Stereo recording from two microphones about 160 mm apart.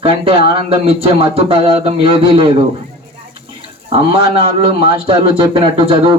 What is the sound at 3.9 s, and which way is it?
Speech, 35° right (ahead or behind).